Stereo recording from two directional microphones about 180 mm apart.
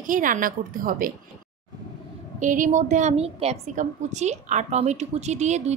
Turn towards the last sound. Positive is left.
turn(degrees=-40)  # may be behind; listen again after turning